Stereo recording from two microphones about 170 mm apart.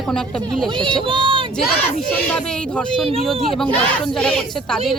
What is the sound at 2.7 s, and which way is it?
Speech, 5° left (ahead or behind).